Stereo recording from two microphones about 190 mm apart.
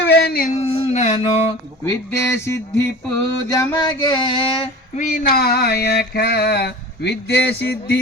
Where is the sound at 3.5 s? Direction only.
20° left (ahead or behind).